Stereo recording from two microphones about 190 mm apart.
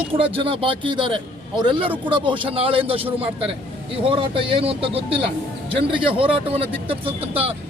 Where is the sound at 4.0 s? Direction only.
30° right (ahead or behind).